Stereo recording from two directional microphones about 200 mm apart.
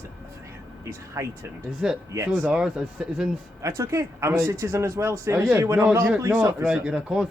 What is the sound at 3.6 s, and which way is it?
Speech, 15° right (ahead or behind).